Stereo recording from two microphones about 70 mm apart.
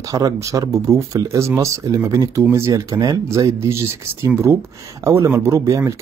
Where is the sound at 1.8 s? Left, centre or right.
Right.